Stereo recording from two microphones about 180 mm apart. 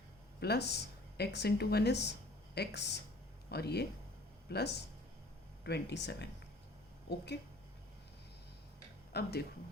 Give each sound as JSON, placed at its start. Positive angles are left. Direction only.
{"t": 0.3, "sound": "speech", "side_deg": 65}
{"t": 9.1, "sound": "speech", "side_deg": 65}